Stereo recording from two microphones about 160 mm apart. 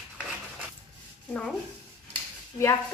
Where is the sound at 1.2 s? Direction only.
5° left (ahead or behind).